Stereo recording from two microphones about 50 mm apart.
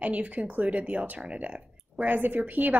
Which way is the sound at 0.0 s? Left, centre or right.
Right.